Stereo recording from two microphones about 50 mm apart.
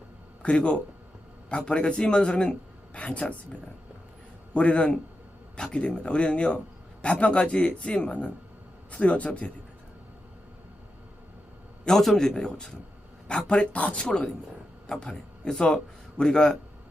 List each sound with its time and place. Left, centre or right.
0.4 s a man's voice: left
11.9 s a man's voice: centre